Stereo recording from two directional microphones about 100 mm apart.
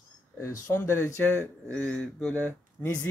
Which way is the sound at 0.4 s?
30° left (ahead or behind).